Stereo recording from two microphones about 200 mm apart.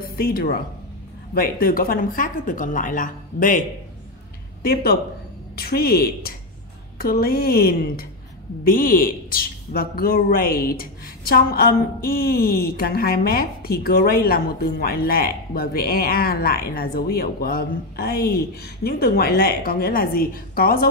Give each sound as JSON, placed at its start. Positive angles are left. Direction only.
{"t": 0.2, "sound": "a man's voice", "side_deg": 50}
{"t": 5.6, "sound": "a man's voice", "side_deg": 50}